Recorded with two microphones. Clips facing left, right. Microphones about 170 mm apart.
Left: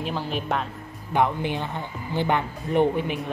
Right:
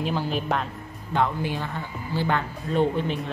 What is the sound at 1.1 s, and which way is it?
Speech, 20° left (ahead or behind).